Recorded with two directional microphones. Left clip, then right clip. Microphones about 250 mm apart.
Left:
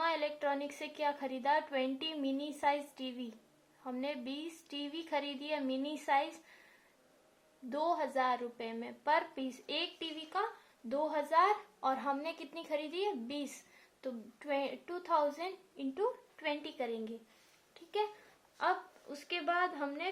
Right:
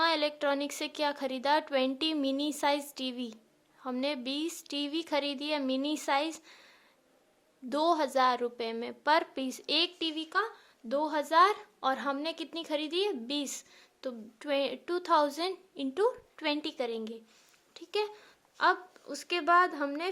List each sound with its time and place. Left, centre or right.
0.0 s a woman's voice: right
7.7 s a woman's voice: right